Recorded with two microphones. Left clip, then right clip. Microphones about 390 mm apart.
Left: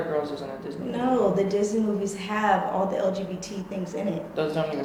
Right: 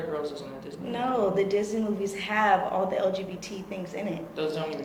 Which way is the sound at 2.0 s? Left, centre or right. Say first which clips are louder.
Right 3 dB; centre.